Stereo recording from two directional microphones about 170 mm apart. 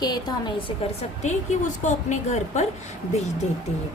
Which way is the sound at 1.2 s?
45° left (ahead or behind).